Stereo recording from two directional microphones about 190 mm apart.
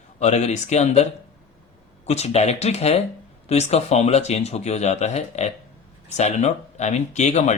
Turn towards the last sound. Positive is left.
turn(degrees=35)  # may be behind; listen again after turning